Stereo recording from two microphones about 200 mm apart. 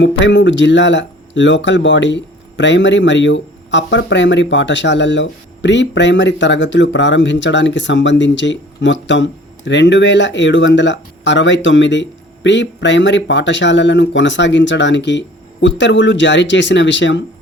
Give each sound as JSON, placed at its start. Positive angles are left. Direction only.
{"t": 0.0, "sound": "speech", "side_deg": 65}